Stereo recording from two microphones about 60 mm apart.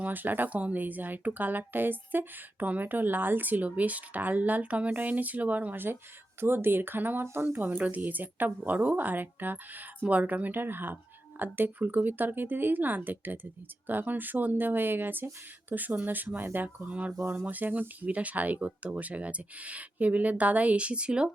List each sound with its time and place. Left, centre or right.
0.0 s speech: right
16.6 s speech: right